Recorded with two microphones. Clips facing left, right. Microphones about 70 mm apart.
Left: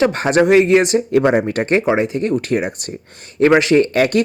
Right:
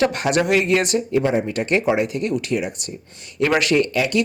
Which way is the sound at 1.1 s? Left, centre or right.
Left.